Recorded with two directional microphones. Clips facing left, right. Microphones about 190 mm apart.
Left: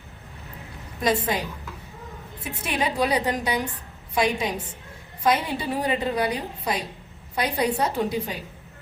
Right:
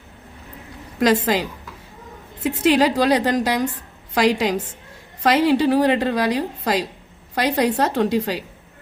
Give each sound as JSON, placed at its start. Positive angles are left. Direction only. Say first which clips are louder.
{"t": 0.9, "sound": "a woman's voice", "louder": "right 6 dB", "side_deg": -85}